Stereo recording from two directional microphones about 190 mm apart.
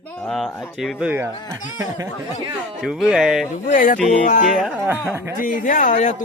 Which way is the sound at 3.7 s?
45° left (ahead or behind).